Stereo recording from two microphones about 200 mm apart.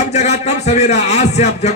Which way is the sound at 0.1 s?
35° left (ahead or behind).